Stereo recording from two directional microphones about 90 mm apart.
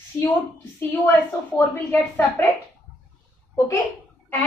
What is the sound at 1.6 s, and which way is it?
Speech, 25° left (ahead or behind).